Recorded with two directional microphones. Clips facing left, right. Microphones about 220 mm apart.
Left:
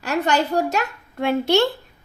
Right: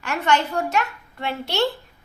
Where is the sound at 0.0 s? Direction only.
40° left (ahead or behind).